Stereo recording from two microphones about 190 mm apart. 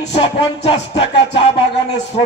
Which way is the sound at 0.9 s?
70° left (ahead or behind).